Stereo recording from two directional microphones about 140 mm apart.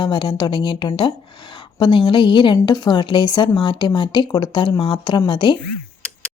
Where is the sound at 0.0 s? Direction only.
35° left (ahead or behind).